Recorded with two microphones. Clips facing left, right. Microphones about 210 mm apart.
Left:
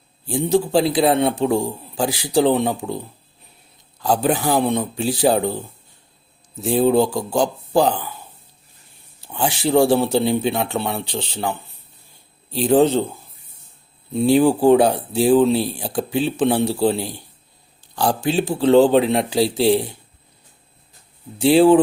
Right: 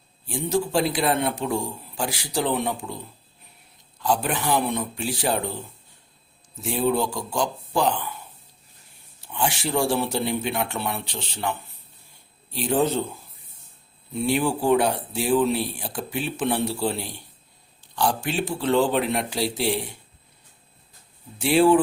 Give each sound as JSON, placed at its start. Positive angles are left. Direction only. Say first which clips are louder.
{"t": 0.3, "sound": "speech", "louder": "left 6 dB", "side_deg": 35}
{"t": 4.0, "sound": "speech", "louder": "left 5 dB", "side_deg": 35}
{"t": 6.6, "sound": "speech", "louder": "left 7 dB", "side_deg": 35}
{"t": 9.2, "sound": "speech", "louder": "left 5 dB", "side_deg": 35}
{"t": 12.7, "sound": "speech", "louder": "left 7 dB", "side_deg": 30}
{"t": 14.1, "sound": "speech", "louder": "left 8 dB", "side_deg": 30}
{"t": 21.3, "sound": "speech", "louder": "left 5 dB", "side_deg": 30}